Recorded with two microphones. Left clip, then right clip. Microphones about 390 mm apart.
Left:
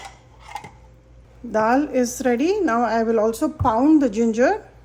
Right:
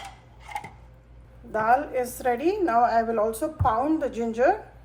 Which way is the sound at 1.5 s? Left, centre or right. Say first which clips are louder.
Left 3 dB; left.